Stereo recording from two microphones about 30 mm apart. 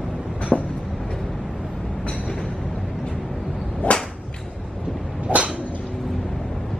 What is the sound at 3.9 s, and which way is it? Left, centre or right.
Whip, left.